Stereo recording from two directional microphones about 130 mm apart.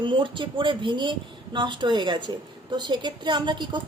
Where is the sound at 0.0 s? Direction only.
40° right (ahead or behind).